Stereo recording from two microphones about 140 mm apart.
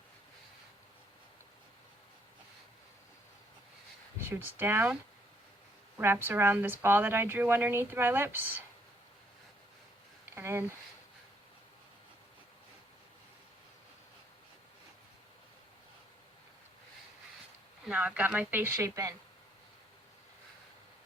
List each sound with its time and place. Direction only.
4.2 s speech: 15° right (ahead or behind)
6.0 s speech: 15° right (ahead or behind)
10.2 s speech: 20° right (ahead or behind)
17.8 s speech: 10° right (ahead or behind)